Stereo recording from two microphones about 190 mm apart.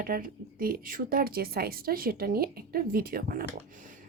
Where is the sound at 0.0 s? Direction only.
50° right (ahead or behind).